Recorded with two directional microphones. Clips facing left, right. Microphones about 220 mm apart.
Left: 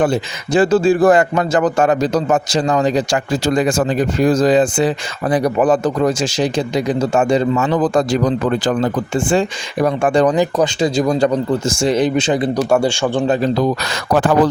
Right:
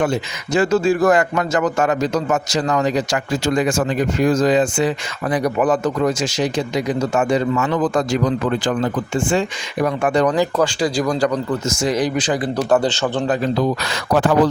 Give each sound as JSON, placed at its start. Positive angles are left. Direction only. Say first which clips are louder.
{"t": 0.0, "sound": "a man's voice", "louder": "left 3 dB", "side_deg": 30}
{"t": 12.5, "sound": "a man's voice", "louder": "left 2 dB", "side_deg": 10}
{"t": 13.2, "sound": "a man's voice", "louder": "left 3 dB", "side_deg": 30}
{"t": 14.1, "sound": "speech", "louder": "left 2 dB", "side_deg": 50}